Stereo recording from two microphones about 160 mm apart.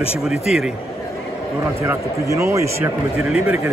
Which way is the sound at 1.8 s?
15° right (ahead or behind).